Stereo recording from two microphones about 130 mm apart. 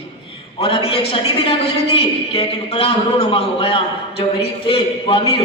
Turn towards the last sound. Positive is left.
turn(degrees=45)  # may be behind; listen again after turning